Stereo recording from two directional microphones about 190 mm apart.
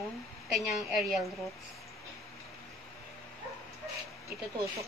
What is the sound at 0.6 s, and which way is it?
Speech, centre (ahead or behind).